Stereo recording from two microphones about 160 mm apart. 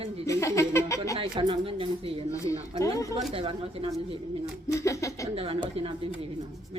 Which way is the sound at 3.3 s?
35° right (ahead or behind).